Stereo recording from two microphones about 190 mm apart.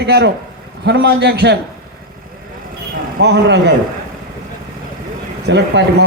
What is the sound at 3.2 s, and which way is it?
Speech, 60° right (ahead or behind).